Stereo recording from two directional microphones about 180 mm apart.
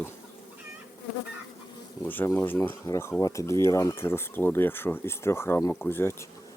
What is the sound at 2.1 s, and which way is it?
Speech, 10° left (ahead or behind).